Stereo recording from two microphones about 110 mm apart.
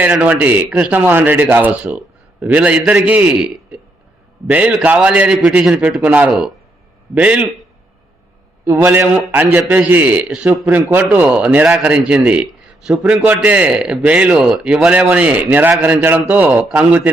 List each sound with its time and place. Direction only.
0.0 s a man's voice: 15° right (ahead or behind)
8.6 s a man's voice: 20° right (ahead or behind)